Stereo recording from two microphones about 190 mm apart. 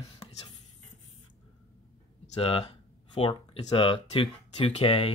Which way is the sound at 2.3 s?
30° left (ahead or behind).